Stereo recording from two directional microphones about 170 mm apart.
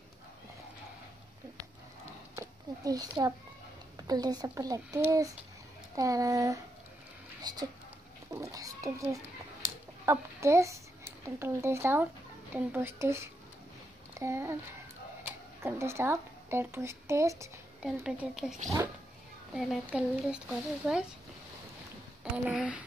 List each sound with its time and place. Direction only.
2.3 s a sound: 20° right (ahead or behind)
3.9 s a child's voice: 25° right (ahead or behind)
17.8 s speech: 5° right (ahead or behind)
22.2 s speech: 5° right (ahead or behind)